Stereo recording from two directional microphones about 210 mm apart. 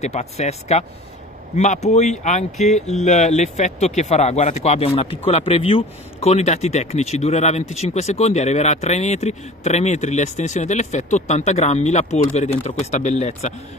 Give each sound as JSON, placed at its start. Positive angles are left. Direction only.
{"t": 0.0, "sound": "speech", "side_deg": 30}